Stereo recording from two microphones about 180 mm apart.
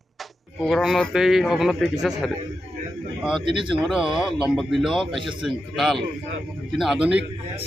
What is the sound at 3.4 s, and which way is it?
Speech, 25° right (ahead or behind).